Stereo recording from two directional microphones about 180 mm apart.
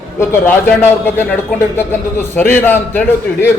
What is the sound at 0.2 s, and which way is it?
Speech, 15° left (ahead or behind).